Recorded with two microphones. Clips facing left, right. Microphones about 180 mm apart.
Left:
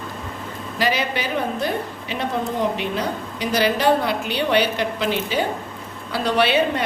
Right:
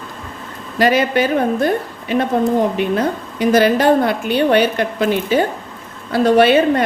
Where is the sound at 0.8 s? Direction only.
50° right (ahead or behind).